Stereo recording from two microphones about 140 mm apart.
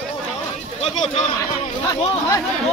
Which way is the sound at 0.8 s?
50° left (ahead or behind).